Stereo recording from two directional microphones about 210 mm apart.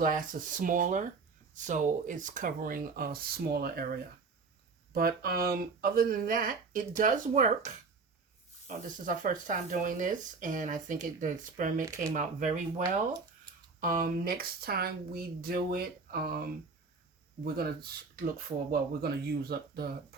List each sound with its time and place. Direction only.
0.0 s speech: 40° right (ahead or behind)
4.9 s speech: 45° right (ahead or behind)
8.6 s speech: 40° right (ahead or behind)